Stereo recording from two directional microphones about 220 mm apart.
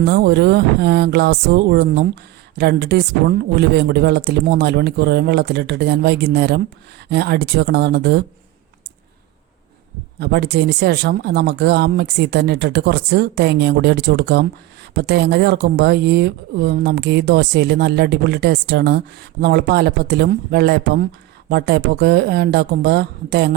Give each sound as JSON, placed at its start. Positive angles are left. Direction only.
{"t": 0.0, "sound": "speech", "side_deg": -50}
{"t": 10.2, "sound": "speech", "side_deg": -50}